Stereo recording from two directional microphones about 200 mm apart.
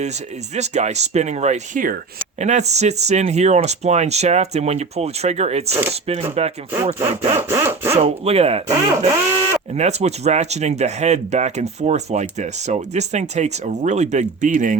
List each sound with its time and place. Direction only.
0.5 s speech: 35° right (ahead or behind)
6.8 s sawing: 30° right (ahead or behind)
7.3 s sawing: 10° right (ahead or behind)
8.0 s speech: 30° right (ahead or behind)